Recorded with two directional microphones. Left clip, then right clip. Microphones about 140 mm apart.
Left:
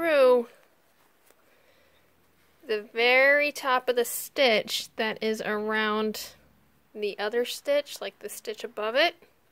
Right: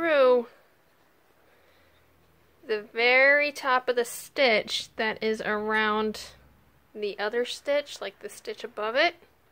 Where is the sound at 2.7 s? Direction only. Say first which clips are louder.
Even; 40° left (ahead or behind).